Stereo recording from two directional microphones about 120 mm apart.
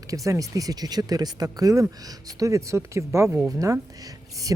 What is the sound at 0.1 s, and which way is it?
Speech, 30° right (ahead or behind).